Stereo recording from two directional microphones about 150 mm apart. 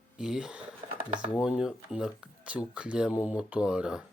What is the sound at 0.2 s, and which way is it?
Speech, 5° right (ahead or behind).